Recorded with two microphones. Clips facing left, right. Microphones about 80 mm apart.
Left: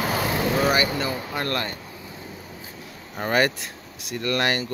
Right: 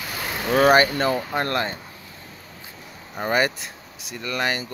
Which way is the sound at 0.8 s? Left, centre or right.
Right.